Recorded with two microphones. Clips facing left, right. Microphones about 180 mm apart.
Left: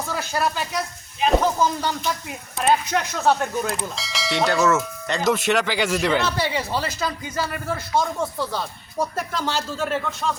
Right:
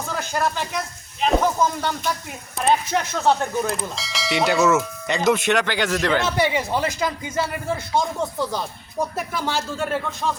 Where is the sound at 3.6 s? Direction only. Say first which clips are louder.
Right 1 dB; centre (ahead or behind).